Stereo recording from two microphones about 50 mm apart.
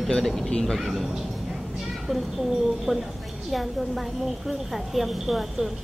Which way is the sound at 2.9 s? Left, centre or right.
Centre.